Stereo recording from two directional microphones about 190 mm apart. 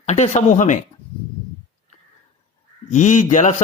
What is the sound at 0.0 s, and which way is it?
Speech, 35° left (ahead or behind).